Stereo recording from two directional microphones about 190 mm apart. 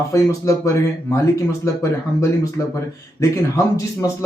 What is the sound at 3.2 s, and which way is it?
Speech, 15° left (ahead or behind).